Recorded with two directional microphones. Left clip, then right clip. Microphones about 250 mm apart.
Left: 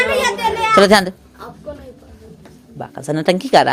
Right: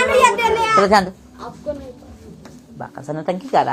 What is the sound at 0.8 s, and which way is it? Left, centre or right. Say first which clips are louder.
Speech: left 4 dB; left.